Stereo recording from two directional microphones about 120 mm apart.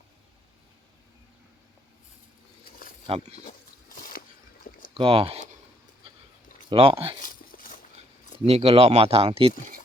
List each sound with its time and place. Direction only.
4.9 s speech: 50° right (ahead or behind)
6.7 s speech: 50° right (ahead or behind)
8.4 s speech: 60° right (ahead or behind)